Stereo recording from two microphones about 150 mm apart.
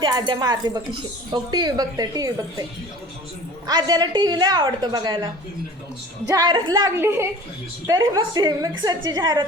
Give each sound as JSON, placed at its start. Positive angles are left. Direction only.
{"t": 0.0, "sound": "a woman's voice", "side_deg": -30}
{"t": 3.7, "sound": "a woman's voice", "side_deg": -25}
{"t": 6.3, "sound": "a woman's voice", "side_deg": -30}